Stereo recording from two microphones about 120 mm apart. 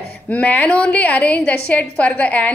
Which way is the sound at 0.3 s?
10° left (ahead or behind).